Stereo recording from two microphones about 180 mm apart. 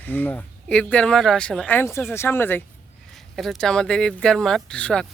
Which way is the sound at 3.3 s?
Centre (ahead or behind).